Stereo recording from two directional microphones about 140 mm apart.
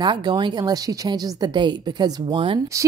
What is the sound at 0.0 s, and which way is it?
Speech, 30° right (ahead or behind).